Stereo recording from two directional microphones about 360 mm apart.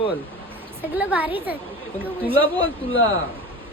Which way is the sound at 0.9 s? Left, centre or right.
Centre.